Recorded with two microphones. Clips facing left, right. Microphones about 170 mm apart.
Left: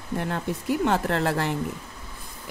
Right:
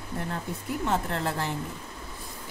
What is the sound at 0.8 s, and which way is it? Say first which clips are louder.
Speech: left 4 dB; 75° left (ahead or behind).